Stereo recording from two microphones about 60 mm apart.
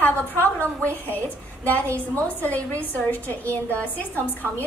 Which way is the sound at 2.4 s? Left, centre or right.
Left.